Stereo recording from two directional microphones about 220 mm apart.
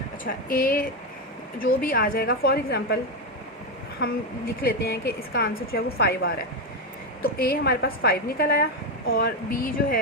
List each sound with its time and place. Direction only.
0.3 s a woman's voice: 40° left (ahead or behind)
4.6 s a woman's voice: 45° left (ahead or behind)